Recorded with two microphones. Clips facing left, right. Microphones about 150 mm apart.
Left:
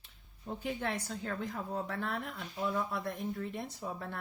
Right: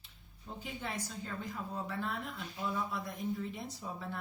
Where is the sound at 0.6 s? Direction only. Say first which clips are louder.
Left 5 dB; 65° left (ahead or behind).